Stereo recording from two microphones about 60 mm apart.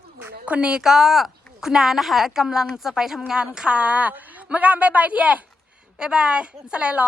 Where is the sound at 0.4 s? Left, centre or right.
Right.